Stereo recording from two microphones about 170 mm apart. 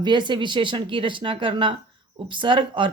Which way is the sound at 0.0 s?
25° right (ahead or behind).